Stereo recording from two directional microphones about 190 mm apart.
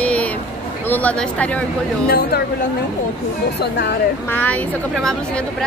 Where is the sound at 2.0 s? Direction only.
55° left (ahead or behind).